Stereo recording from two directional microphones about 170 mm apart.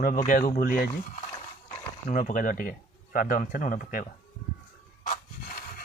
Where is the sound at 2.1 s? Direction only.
50° left (ahead or behind).